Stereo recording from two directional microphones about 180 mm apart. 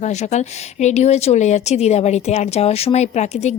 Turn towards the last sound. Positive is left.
turn(degrees=40)  # may be behind; listen again after turning